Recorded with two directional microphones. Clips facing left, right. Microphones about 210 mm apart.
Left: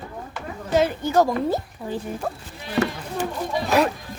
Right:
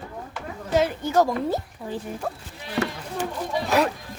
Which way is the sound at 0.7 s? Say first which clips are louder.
Left 2 dB; 30° left (ahead or behind).